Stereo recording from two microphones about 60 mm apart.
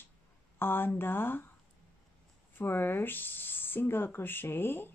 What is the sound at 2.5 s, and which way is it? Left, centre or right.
Speech, left.